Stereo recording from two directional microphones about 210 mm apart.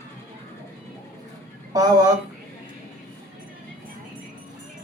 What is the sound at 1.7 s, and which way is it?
Speech, 20° right (ahead or behind).